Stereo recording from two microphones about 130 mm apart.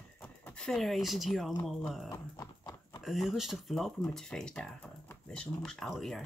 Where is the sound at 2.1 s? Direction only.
25° left (ahead or behind).